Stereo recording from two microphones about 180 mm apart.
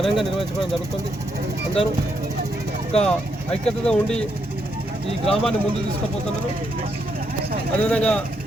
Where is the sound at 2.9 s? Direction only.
35° left (ahead or behind).